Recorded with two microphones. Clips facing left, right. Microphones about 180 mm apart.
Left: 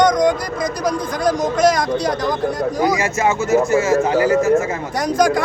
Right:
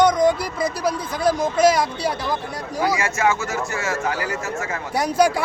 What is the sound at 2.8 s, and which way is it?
A man's voice, 20° left (ahead or behind).